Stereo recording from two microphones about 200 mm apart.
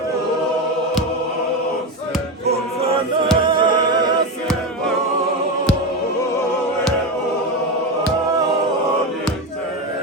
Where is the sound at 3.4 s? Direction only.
25° right (ahead or behind).